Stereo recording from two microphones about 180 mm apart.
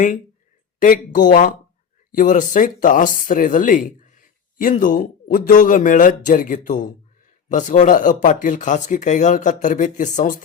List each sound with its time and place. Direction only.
0.8 s speech: 45° left (ahead or behind)